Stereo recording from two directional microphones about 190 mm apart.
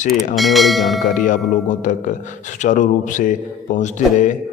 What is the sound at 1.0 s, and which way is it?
A man's voice, 45° left (ahead or behind).